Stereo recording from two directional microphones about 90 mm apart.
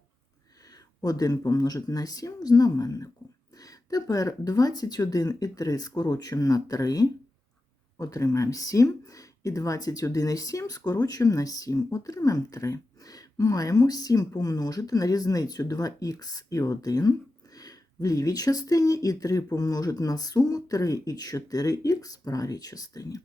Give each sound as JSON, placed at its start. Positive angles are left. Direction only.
{"t": 1.0, "sound": "speech", "side_deg": 45}